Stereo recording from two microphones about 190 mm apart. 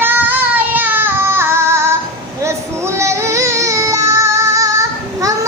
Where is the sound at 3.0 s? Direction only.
15° right (ahead or behind).